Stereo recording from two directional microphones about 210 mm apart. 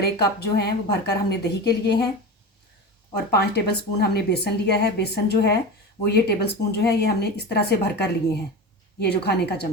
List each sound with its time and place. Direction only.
0.0 s a woman's voice: 50° left (ahead or behind)
3.3 s a woman's voice: 50° left (ahead or behind)